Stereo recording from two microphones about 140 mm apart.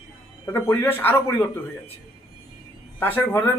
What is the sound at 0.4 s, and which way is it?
A man's voice, 20° left (ahead or behind).